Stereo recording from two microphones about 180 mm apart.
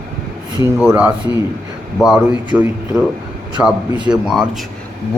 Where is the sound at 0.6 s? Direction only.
10° right (ahead or behind).